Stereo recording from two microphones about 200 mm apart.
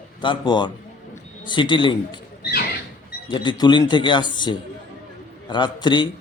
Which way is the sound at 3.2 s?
20° left (ahead or behind).